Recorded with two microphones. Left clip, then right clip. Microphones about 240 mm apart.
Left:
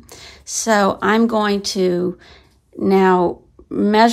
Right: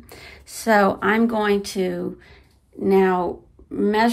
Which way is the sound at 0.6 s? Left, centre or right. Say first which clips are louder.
Left 2 dB; centre.